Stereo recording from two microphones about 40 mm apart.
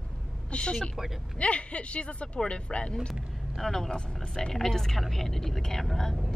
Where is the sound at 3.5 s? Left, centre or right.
Centre.